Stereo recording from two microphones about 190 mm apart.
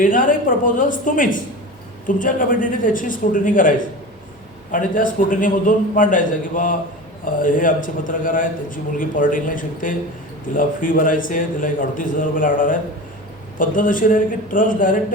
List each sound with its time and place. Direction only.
0.0 s a man's voice: 45° left (ahead or behind)